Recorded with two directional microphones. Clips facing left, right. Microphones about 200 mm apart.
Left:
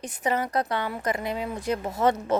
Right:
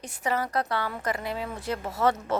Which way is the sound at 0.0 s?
20° left (ahead or behind).